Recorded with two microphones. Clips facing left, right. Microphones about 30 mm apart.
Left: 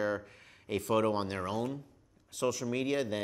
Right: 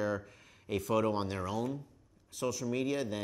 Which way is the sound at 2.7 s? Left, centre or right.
Left.